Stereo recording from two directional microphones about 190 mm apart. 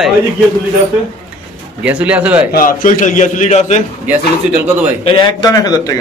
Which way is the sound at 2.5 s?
45° left (ahead or behind).